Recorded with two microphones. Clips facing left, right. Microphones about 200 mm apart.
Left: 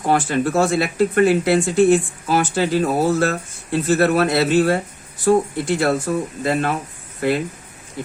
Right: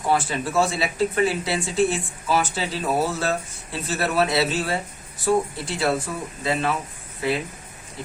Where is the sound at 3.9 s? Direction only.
55° left (ahead or behind).